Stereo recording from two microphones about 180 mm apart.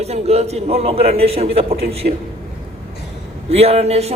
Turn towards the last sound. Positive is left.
turn(degrees=-35)  # may be behind; listen again after turning